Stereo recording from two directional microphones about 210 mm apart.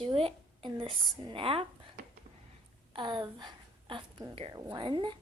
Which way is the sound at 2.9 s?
20° right (ahead or behind).